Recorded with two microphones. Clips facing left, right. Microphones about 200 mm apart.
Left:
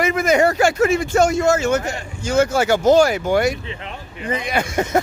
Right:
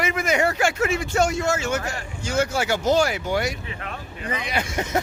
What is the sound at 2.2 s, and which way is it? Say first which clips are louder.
Speech: left 6 dB; 45° left (ahead or behind).